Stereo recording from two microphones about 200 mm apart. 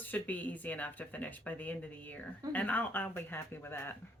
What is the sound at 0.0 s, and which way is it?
Speech, 10° left (ahead or behind).